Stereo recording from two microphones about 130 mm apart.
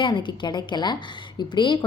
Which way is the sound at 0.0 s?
40° left (ahead or behind).